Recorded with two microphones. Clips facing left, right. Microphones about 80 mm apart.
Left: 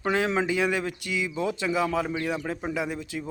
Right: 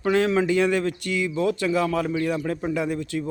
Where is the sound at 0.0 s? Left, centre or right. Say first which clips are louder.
Right 4 dB; centre.